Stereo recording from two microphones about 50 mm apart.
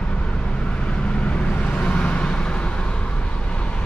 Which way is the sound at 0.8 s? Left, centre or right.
Left.